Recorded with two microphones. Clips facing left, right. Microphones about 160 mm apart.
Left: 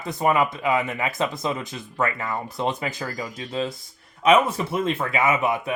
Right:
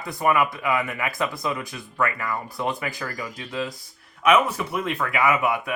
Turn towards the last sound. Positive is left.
turn(degrees=20)  # may be behind; listen again after turning